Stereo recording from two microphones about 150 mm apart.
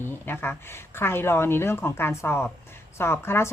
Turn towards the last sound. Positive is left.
turn(degrees=15)  # may be behind; listen again after turning